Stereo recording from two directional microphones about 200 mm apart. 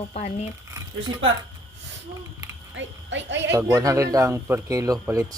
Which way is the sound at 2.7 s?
65° right (ahead or behind).